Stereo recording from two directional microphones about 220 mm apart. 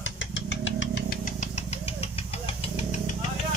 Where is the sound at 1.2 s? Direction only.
35° left (ahead or behind).